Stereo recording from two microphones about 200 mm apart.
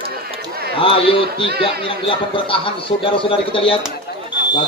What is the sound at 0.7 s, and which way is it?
Speech, 25° left (ahead or behind).